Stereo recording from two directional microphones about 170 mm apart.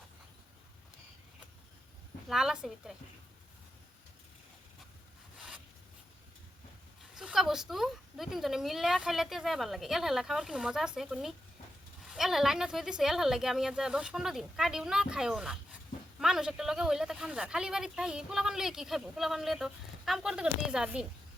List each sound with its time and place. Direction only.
2.3 s speech: 5° right (ahead or behind)
7.2 s speech: centre (ahead or behind)